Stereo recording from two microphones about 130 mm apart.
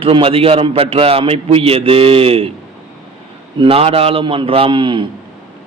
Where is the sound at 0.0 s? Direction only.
45° right (ahead or behind).